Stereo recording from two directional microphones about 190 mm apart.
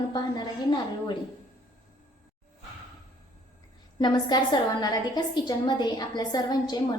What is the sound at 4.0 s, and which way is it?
A woman's voice, 20° left (ahead or behind).